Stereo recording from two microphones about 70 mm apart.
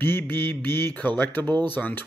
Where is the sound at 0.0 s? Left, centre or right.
Left.